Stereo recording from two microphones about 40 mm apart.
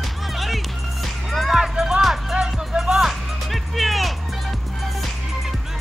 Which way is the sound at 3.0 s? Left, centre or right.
Centre.